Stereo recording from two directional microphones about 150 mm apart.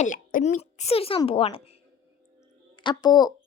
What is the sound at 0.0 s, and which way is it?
Speech, 65° left (ahead or behind).